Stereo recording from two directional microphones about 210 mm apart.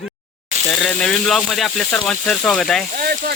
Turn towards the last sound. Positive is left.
turn(degrees=-45)  # may be behind; listen again after turning